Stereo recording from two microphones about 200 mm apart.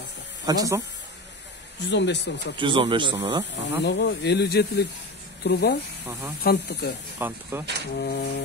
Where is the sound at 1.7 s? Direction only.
60° left (ahead or behind).